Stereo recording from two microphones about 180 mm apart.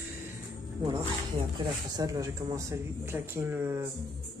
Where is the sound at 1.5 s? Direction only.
20° right (ahead or behind).